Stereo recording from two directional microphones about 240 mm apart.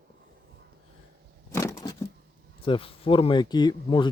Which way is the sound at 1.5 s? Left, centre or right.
Centre.